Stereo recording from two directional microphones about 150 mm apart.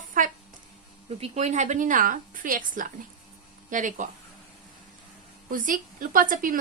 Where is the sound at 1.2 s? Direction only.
50° right (ahead or behind).